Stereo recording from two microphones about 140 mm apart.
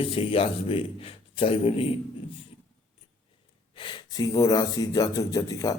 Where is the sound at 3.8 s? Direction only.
35° left (ahead or behind).